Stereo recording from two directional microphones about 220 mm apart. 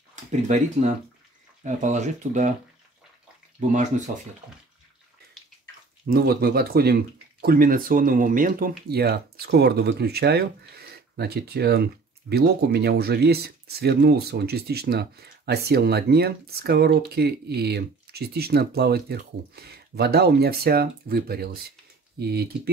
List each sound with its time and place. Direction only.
0.1 s speech: 35° right (ahead or behind)
3.7 s speech: 30° right (ahead or behind)
6.0 s speech: 45° right (ahead or behind)